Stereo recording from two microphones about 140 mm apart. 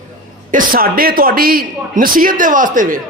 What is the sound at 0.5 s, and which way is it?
A man's voice, 90° right.